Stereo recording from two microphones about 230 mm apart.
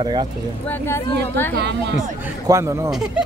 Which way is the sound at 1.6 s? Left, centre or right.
Right.